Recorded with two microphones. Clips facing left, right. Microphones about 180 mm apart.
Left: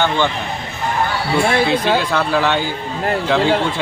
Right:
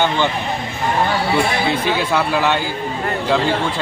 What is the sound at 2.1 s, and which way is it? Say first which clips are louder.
Speech: even; 10° right (ahead or behind).